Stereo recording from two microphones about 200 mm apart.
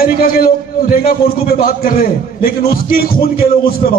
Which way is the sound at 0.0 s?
45° left (ahead or behind).